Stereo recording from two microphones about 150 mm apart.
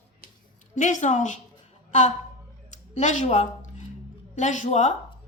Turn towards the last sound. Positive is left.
turn(degrees=50)  # may be behind; listen again after turning